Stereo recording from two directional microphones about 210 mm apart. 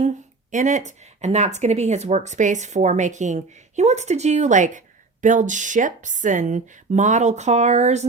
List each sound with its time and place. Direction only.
0.5 s speech: 35° right (ahead or behind)